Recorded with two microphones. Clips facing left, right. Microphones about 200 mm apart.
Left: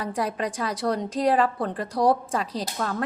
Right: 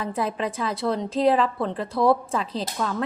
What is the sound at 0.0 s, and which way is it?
A woman's voice, 40° left (ahead or behind).